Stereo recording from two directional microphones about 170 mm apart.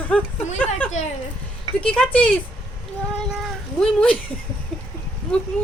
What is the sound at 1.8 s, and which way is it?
Speech, 5° left (ahead or behind).